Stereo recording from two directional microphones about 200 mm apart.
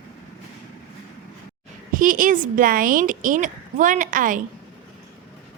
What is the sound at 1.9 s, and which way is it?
A woman's voice, 45° right (ahead or behind).